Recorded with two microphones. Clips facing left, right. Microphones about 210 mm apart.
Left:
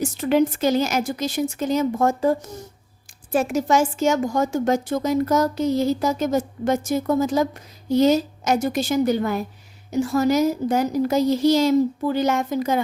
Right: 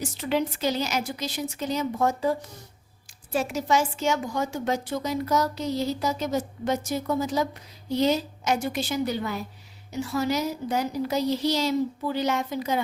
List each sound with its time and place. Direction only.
0.0 s a woman's voice: 50° left (ahead or behind)